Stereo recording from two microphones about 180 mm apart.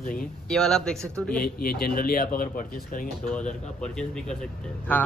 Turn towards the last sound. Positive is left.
turn(degrees=5)  # may be behind; listen again after turning